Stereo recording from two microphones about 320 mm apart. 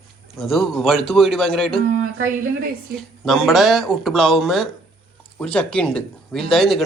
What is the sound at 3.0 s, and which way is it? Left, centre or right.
Speech, centre.